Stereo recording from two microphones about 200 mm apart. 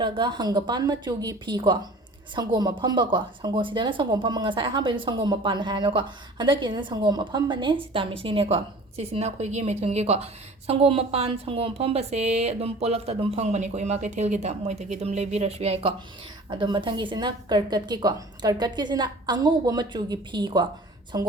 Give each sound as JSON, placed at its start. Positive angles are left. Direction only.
{"t": 0.0, "sound": "a woman's voice", "side_deg": -20}